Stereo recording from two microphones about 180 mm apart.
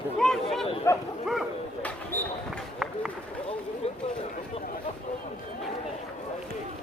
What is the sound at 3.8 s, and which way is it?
Chatter, 35° left (ahead or behind).